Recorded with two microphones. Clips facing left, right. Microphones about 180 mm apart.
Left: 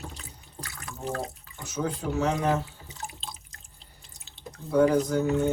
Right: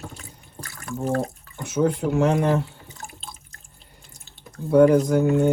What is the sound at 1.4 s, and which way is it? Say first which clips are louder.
Speech: right 9 dB; 60° right (ahead or behind).